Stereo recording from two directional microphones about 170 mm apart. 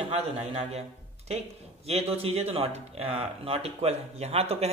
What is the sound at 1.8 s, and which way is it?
Speech, 35° right (ahead or behind).